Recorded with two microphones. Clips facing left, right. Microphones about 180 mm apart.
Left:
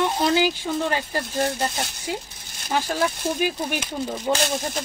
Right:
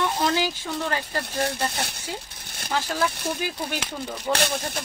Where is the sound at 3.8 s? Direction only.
65° right (ahead or behind).